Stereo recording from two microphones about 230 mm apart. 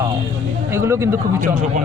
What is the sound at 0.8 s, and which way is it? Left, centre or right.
Speech, centre.